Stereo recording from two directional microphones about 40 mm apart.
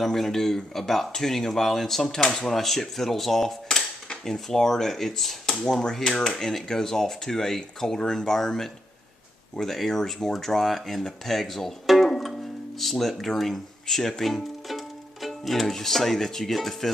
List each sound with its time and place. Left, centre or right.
0.0 s speech: centre
5.7 s speech: centre